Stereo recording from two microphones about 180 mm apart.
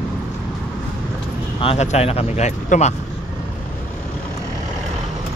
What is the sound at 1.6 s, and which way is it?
Speech, 35° left (ahead or behind).